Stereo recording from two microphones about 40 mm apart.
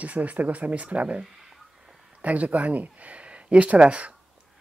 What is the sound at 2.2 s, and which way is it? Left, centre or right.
Speech, right.